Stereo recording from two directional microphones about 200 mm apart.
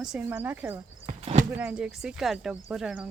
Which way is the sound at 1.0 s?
30° right (ahead or behind).